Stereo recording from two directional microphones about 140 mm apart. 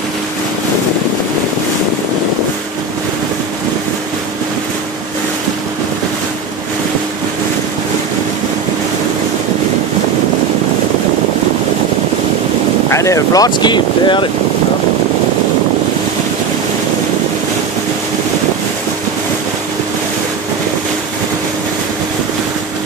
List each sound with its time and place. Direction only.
12.9 s speech: 20° left (ahead or behind)